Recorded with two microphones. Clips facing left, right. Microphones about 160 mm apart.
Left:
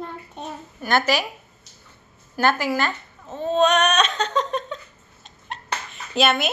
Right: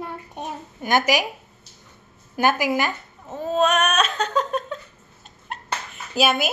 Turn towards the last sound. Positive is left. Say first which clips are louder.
# even
turn(degrees=-10)  # may be behind; listen again after turning